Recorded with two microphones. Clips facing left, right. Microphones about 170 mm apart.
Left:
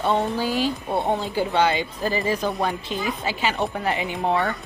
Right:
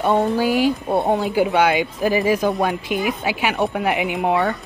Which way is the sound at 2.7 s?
15° right (ahead or behind).